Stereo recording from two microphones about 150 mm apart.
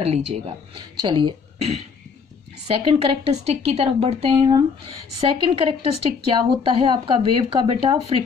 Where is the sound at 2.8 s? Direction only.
40° right (ahead or behind).